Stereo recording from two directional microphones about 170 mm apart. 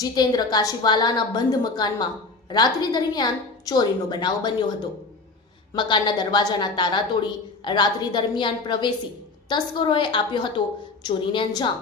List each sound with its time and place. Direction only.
0.0 s a woman's voice: 25° left (ahead or behind)